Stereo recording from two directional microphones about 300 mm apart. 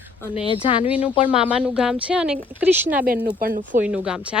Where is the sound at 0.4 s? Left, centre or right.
Centre.